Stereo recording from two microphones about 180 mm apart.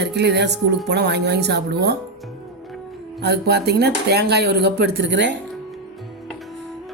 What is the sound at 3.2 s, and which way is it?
Speech, 65° right (ahead or behind).